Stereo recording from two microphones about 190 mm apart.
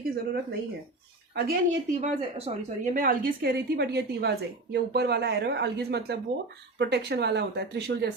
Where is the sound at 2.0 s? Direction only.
35° right (ahead or behind).